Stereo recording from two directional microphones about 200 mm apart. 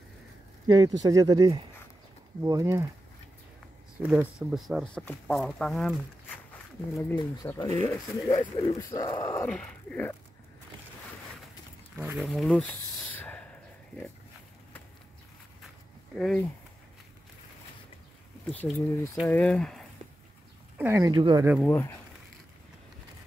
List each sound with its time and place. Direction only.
0.7 s speech: 20° right (ahead or behind)
4.0 s speech: 5° right (ahead or behind)
6.9 s speech: 15° left (ahead or behind)
9.5 s speech: 5° left (ahead or behind)
12.0 s a sound: 5° right (ahead or behind)
16.2 s speech: centre (ahead or behind)
18.5 s speech: 10° left (ahead or behind)
20.7 s speech: 10° right (ahead or behind)
21.6 s speech: 10° left (ahead or behind)